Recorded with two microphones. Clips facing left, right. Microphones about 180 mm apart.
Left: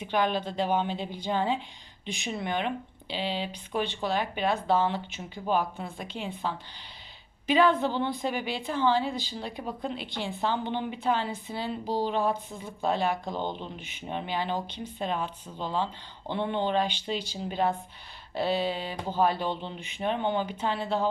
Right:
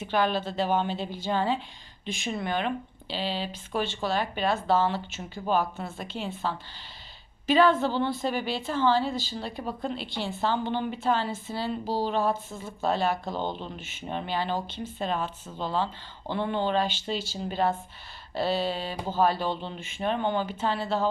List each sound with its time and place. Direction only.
0.1 s speech: 15° left (ahead or behind)